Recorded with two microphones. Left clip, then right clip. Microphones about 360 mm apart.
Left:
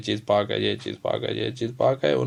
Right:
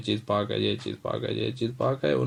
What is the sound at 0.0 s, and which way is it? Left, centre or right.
Speech, centre.